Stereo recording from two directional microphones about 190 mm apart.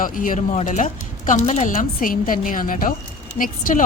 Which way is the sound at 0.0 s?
45° left (ahead or behind).